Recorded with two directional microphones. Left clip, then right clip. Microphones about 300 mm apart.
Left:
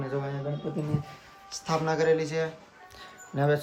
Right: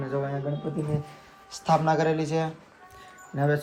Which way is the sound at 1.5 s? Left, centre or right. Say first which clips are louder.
Right 5 dB; centre.